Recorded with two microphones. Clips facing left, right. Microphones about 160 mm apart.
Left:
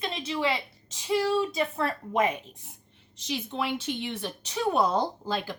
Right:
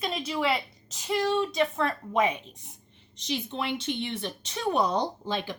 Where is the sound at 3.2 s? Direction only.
5° left (ahead or behind).